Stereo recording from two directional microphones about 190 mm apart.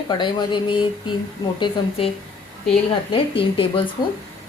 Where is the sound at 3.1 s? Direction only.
30° left (ahead or behind).